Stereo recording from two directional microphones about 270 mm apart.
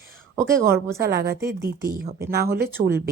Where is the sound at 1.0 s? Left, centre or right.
Right.